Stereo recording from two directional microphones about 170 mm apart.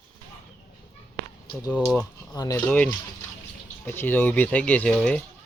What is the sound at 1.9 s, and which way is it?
Speech, 20° left (ahead or behind).